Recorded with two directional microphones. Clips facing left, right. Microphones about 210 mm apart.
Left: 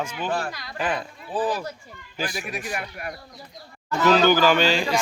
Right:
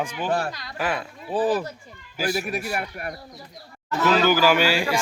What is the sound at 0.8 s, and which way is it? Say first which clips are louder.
Speech: even; 20° left (ahead or behind).